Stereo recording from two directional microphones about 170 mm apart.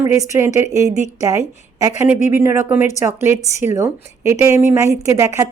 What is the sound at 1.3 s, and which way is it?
A woman's voice, 20° right (ahead or behind).